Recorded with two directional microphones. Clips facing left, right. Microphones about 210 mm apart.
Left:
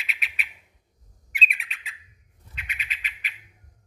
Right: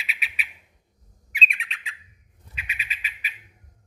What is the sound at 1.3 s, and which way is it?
Bird, 5° left (ahead or behind).